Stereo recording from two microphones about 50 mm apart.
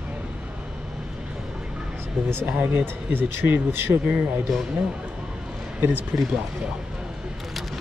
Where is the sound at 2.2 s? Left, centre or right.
Right.